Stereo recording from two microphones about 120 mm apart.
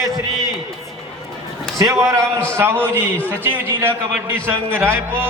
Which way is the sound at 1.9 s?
25° right (ahead or behind).